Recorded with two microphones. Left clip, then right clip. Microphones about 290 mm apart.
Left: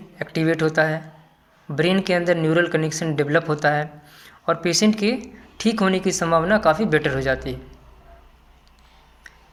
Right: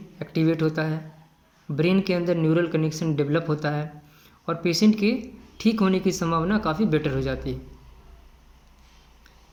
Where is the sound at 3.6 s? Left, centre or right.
Centre.